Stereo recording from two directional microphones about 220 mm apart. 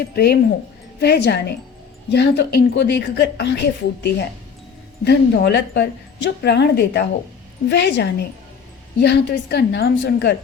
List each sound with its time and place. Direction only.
0.0 s a woman's voice: 45° left (ahead or behind)